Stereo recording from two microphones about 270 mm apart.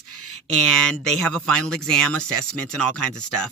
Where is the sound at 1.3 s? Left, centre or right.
Centre.